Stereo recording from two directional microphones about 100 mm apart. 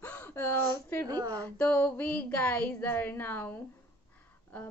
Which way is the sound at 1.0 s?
35° right (ahead or behind).